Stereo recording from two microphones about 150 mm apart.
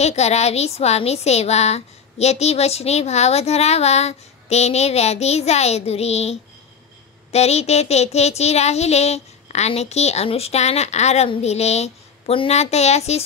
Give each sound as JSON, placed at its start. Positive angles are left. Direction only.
{"t": 0.0, "sound": "speech", "side_deg": 45}